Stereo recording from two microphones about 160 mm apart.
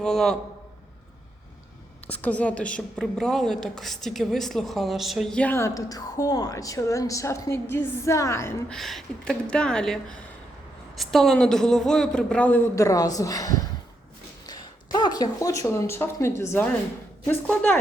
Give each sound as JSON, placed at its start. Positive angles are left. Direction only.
{"t": 0.0, "sound": "a woman's voice", "side_deg": 5}
{"t": 2.0, "sound": "a woman's voice", "side_deg": 10}
{"t": 8.7, "sound": "a woman's voice", "side_deg": 0}
{"t": 14.4, "sound": "a sound", "side_deg": 25}
{"t": 16.4, "sound": "a woman's voice", "side_deg": 15}